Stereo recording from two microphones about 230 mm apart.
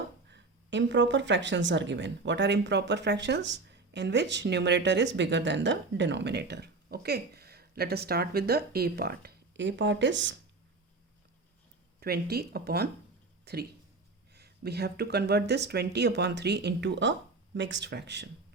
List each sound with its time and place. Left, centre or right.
0.3 s speech: right
11.9 s speech: right